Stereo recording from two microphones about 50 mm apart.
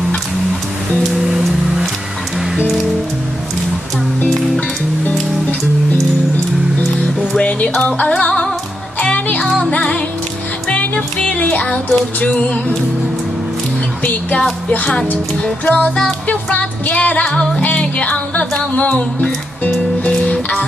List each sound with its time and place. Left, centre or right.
1.1 s music: centre
7.3 s music: left
11.3 s music: left
14.7 s music: centre
16.3 s music: left